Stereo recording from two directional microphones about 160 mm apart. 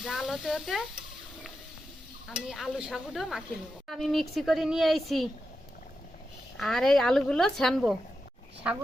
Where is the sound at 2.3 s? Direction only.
5° right (ahead or behind).